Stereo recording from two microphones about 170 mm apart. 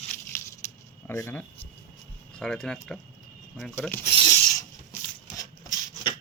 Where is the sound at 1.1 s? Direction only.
15° left (ahead or behind).